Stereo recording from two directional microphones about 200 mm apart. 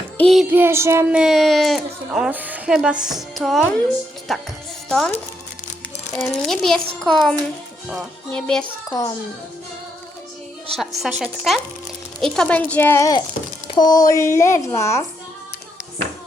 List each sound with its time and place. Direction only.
0.2 s speech: centre (ahead or behind)
0.5 s child singing: 10° right (ahead or behind)
1.2 s speech: centre (ahead or behind)
6.1 s speech: centre (ahead or behind)
8.9 s a child's voice: 15° left (ahead or behind)
10.8 s a child's voice: centre (ahead or behind)